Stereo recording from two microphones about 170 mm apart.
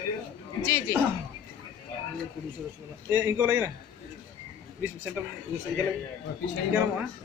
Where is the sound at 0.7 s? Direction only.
15° left (ahead or behind).